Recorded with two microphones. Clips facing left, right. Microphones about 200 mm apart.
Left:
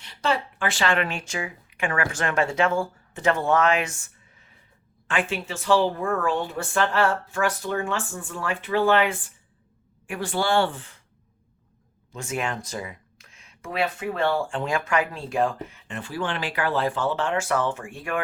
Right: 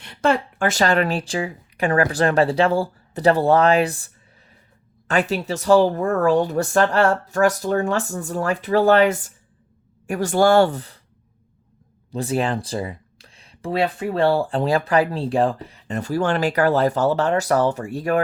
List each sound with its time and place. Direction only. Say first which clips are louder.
0.0 s speech: right 6 dB; 50° right (ahead or behind)
12.1 s speech: right 7 dB; 35° right (ahead or behind)